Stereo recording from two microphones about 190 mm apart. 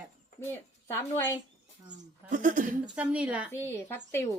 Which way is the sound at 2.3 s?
40° right (ahead or behind).